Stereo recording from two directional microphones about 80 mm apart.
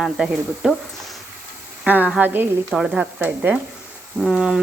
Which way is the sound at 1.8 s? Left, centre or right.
Right.